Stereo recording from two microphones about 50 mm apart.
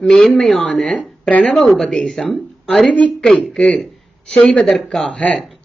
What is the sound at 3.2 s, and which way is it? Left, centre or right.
Speech, centre.